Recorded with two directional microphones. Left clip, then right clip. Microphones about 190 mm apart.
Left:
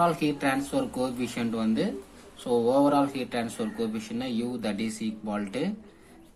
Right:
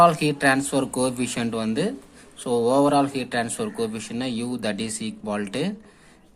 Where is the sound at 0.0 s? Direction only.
40° right (ahead or behind).